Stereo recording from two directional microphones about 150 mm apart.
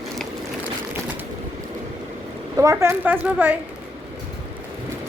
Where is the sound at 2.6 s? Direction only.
20° right (ahead or behind).